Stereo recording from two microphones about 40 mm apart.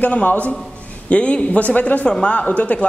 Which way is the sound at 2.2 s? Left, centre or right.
Left.